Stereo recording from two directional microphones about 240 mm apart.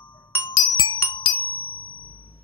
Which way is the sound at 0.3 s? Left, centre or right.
Centre.